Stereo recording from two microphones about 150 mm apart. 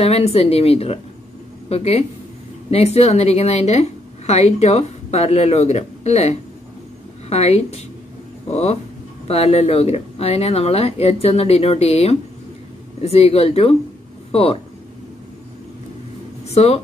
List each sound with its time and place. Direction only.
0.0 s speech: 45° left (ahead or behind)
9.3 s speech: 45° left (ahead or behind)
16.4 s speech: 45° left (ahead or behind)